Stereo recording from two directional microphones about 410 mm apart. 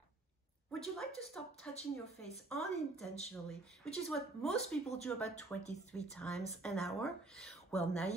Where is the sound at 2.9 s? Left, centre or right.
Centre.